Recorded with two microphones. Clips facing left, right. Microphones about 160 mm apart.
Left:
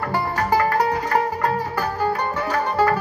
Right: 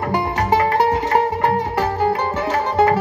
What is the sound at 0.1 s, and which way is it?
Music, 20° right (ahead or behind).